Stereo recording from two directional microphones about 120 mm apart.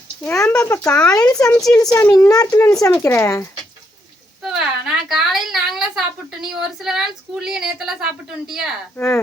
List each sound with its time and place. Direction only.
0.6 s speech: 25° left (ahead or behind)
1.5 s a woman's voice: 5° left (ahead or behind)
1.7 s speech: 30° left (ahead or behind)
4.4 s a sound: 5° right (ahead or behind)
9.0 s speech: 20° left (ahead or behind)